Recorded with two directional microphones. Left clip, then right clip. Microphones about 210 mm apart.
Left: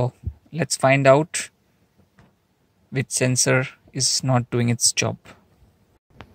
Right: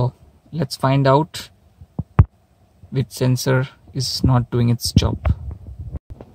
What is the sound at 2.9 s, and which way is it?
Speech, centre (ahead or behind).